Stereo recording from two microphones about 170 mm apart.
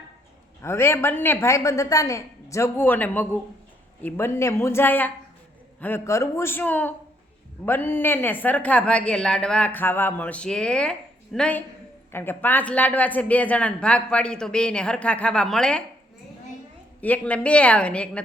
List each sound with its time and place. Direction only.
0.6 s speech: 15° left (ahead or behind)
17.0 s speech: 10° left (ahead or behind)